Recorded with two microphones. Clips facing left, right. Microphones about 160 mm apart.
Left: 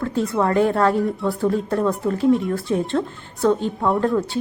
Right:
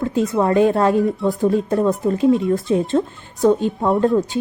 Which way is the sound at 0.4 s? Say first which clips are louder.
Right 2 dB; 20° right (ahead or behind).